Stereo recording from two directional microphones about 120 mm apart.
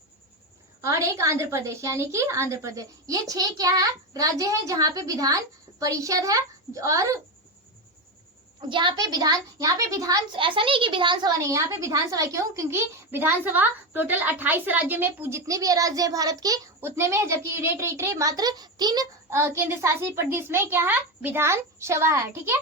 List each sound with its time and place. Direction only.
0.8 s a woman's voice: 25° right (ahead or behind)
8.7 s a child's voice: 40° right (ahead or behind)
10.3 s a woman's voice: 45° right (ahead or behind)
19.3 s a woman's voice: 20° right (ahead or behind)